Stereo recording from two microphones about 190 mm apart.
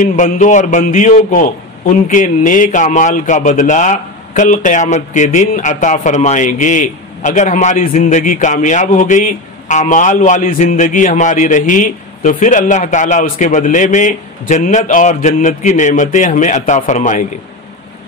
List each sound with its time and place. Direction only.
0.0 s a man's voice: 40° left (ahead or behind)